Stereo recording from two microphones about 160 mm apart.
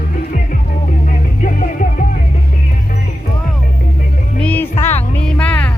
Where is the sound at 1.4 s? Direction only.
55° left (ahead or behind).